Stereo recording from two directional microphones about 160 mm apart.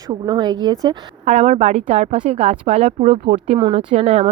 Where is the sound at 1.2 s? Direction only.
45° right (ahead or behind).